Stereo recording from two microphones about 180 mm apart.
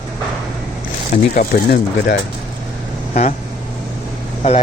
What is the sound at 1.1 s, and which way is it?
Speech, 55° left (ahead or behind).